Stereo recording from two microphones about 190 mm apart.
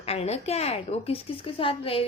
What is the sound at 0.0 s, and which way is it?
A woman's voice, 35° left (ahead or behind).